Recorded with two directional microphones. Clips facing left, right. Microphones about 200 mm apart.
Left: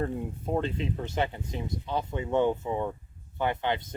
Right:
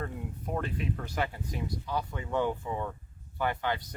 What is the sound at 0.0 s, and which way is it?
Speech, 25° left (ahead or behind).